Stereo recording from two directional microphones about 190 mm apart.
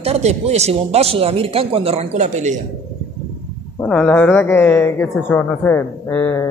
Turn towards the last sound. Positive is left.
turn(degrees=10)  # may be behind; listen again after turning